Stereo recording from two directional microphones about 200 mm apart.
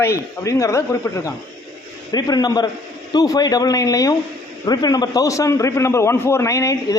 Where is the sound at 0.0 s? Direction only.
15° left (ahead or behind).